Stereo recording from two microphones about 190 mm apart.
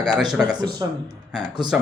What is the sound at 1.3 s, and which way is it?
Speech, centre (ahead or behind).